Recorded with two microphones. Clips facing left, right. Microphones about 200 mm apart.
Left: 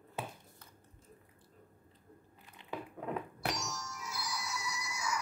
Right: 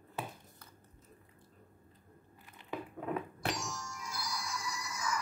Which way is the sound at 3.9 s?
5° left (ahead or behind).